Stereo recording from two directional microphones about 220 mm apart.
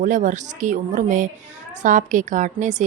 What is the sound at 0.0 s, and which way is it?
A woman's voice, 35° right (ahead or behind).